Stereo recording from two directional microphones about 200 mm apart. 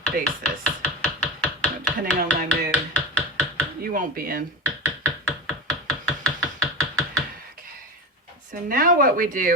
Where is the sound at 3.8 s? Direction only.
45° right (ahead or behind).